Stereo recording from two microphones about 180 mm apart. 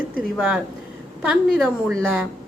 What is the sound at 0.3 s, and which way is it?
A woman's voice, centre (ahead or behind).